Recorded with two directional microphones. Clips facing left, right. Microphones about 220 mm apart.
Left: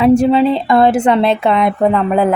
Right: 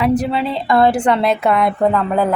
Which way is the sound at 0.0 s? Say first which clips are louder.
Left 7 dB; 25° left (ahead or behind).